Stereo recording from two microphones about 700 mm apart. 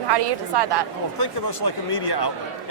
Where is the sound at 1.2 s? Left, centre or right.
Left.